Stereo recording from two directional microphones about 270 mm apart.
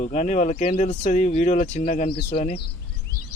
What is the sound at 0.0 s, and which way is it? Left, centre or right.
Speech, left.